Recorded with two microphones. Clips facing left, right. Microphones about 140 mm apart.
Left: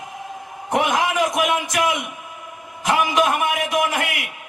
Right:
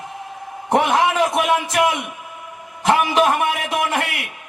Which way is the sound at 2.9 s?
35° right (ahead or behind).